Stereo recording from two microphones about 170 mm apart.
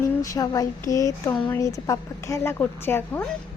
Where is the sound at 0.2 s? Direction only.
20° left (ahead or behind).